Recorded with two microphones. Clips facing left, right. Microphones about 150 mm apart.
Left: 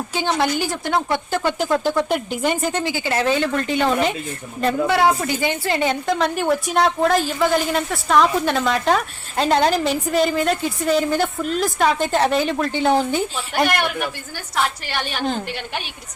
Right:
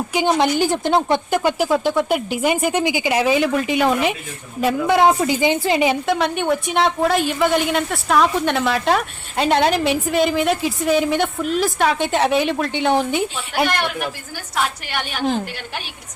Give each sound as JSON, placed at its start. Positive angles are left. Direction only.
{"t": 0.1, "sound": "speech", "side_deg": -15}
{"t": 4.9, "sound": "a woman's voice", "side_deg": -20}